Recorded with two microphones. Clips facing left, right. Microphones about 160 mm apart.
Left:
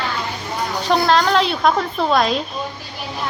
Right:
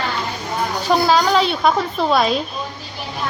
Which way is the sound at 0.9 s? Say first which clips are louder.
Even; 5° right (ahead or behind).